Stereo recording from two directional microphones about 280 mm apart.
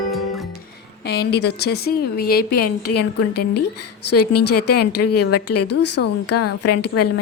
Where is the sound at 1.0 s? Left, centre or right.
Left.